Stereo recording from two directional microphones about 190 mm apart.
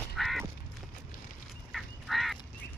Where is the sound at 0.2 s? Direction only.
Centre (ahead or behind).